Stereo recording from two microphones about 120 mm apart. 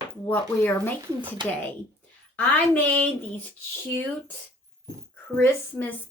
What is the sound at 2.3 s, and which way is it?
A woman's voice, 15° left (ahead or behind).